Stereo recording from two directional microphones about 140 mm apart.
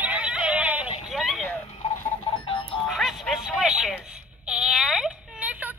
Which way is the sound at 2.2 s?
35° left (ahead or behind).